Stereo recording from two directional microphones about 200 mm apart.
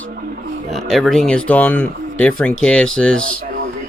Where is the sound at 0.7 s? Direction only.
Centre (ahead or behind).